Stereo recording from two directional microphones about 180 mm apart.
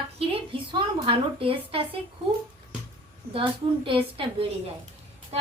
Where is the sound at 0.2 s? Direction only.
30° right (ahead or behind).